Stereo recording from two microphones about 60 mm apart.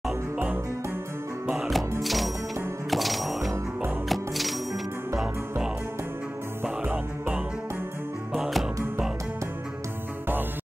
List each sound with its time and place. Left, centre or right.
1.5 s music: centre
6.6 s music: right
8.4 s music: centre